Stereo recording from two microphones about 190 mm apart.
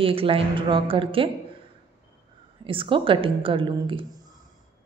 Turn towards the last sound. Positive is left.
turn(degrees=-25)  # may be behind; listen again after turning